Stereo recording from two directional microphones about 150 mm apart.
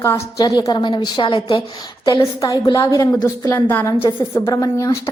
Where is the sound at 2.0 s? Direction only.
25° left (ahead or behind).